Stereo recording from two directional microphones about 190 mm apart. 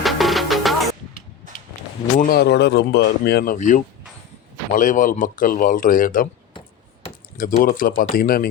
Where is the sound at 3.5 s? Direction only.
40° left (ahead or behind).